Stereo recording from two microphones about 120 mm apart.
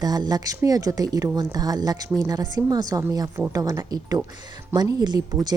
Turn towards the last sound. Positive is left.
turn(degrees=-30)  # may be behind; listen again after turning